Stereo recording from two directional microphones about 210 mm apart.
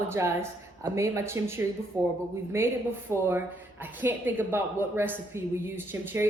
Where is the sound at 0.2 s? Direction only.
15° right (ahead or behind).